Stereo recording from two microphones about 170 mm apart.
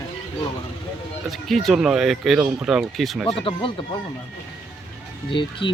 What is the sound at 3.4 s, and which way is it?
Speech, 30° left (ahead or behind).